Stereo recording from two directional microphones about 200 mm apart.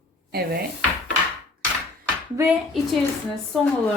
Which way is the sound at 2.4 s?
15° right (ahead or behind).